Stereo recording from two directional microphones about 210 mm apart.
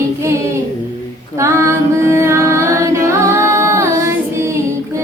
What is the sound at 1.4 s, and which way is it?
Music, 15° right (ahead or behind).